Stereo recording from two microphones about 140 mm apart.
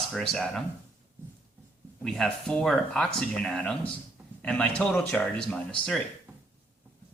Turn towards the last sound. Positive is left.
turn(degrees=10)  # may be behind; listen again after turning